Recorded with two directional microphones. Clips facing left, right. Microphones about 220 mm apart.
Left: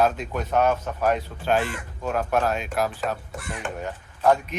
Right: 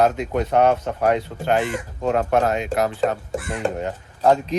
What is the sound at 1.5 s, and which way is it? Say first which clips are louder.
Speech: right 3 dB; 20° right (ahead or behind).